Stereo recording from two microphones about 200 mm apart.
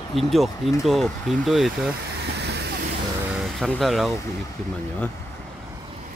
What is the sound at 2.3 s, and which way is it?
Vehicle, 55° right (ahead or behind).